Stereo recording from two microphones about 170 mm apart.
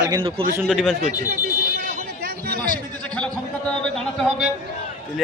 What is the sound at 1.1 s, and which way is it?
Speech, 45° right (ahead or behind).